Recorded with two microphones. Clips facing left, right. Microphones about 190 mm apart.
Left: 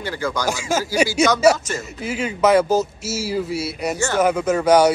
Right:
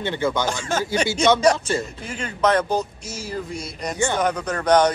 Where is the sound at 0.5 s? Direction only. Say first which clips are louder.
Left 2 dB; 10° left (ahead or behind).